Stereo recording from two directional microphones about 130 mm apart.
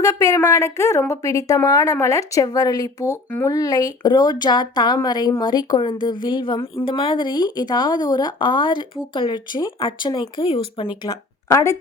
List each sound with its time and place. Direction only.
0.0 s a woman's voice: 25° left (ahead or behind)
3.2 s speech: 10° left (ahead or behind)
3.5 s speech: 30° left (ahead or behind)